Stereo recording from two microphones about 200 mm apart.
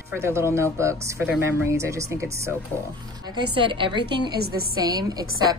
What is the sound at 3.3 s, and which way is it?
A woman's voice, 25° right (ahead or behind).